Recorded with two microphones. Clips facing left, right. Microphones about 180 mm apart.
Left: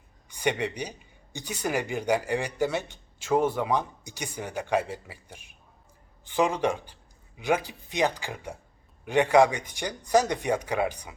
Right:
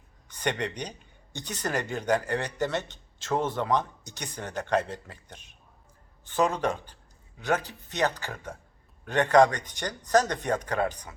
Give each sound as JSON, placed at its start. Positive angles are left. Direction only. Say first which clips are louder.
{"t": 0.3, "sound": "a man's voice", "louder": "left 2 dB", "side_deg": 10}